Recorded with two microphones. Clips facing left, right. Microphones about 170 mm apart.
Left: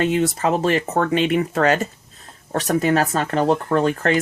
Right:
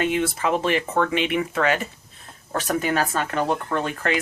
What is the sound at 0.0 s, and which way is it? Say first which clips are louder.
Speech: left 4 dB; 40° left (ahead or behind).